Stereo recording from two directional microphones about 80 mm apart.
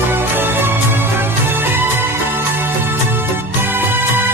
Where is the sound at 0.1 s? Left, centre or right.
Right.